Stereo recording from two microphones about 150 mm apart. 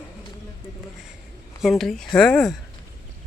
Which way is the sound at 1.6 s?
Centre (ahead or behind).